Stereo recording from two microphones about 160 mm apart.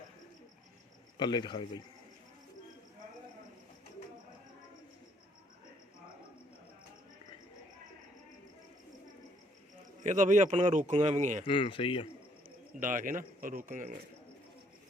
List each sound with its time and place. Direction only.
1.2 s speech: 30° left (ahead or behind)
10.0 s a man's voice: 50° right (ahead or behind)
11.4 s speech: 30° left (ahead or behind)
12.8 s a man's voice: 55° right (ahead or behind)